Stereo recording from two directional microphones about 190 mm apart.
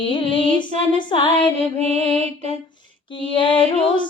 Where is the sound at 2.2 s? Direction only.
35° right (ahead or behind).